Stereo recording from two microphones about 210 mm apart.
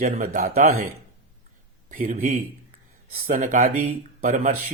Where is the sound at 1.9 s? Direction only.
35° right (ahead or behind).